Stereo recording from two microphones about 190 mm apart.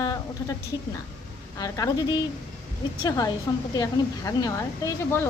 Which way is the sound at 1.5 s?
20° left (ahead or behind).